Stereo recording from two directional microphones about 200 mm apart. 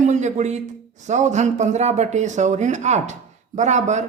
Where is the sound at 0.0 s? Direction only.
35° right (ahead or behind).